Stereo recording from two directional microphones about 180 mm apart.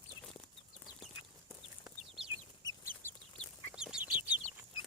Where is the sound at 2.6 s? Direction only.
15° left (ahead or behind).